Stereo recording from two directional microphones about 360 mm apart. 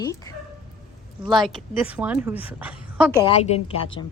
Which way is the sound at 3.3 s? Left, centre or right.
Centre.